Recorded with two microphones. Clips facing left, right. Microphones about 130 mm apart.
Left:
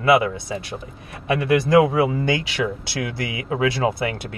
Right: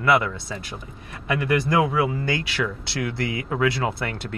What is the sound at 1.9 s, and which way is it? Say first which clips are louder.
Speech: left 4 dB; 20° left (ahead or behind).